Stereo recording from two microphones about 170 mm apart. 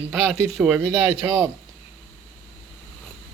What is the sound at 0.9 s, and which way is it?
Speech, 20° right (ahead or behind).